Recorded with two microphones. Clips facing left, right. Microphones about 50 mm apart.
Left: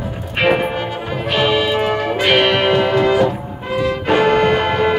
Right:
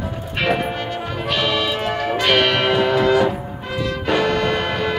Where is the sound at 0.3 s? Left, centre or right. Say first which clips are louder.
Left 5 dB; left.